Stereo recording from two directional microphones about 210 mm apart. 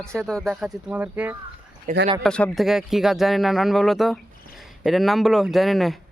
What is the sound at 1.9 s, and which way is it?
Speech, 35° right (ahead or behind).